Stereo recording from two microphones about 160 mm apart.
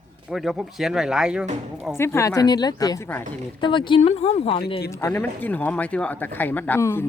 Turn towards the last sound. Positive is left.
turn(degrees=15)  # may be behind; listen again after turning